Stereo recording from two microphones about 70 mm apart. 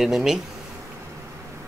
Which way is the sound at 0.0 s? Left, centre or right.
Centre.